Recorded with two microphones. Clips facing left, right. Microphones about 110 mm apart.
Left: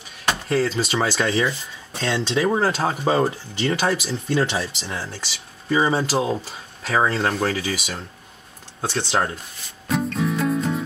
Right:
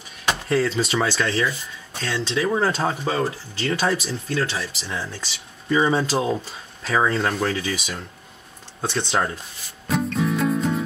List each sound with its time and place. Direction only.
0.6 s speech: centre (ahead or behind)
0.9 s speech: 20° left (ahead or behind)
2.6 s speech: 5° left (ahead or behind)
3.1 s speech: 25° left (ahead or behind)
3.8 s speech: 5° left (ahead or behind)
4.3 s speech: 20° left (ahead or behind)
9.8 s music: centre (ahead or behind)